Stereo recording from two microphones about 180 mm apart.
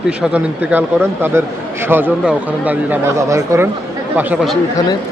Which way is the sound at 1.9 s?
10° right (ahead or behind).